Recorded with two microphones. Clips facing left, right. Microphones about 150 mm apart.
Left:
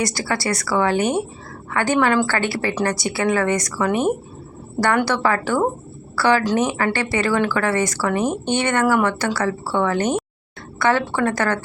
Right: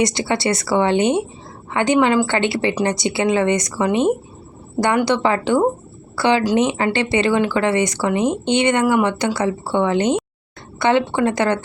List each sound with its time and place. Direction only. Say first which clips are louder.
0.0 s speech: right 4 dB; 20° right (ahead or behind)